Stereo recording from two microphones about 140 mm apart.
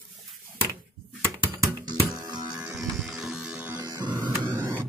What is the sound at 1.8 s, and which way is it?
Music, 30° right (ahead or behind).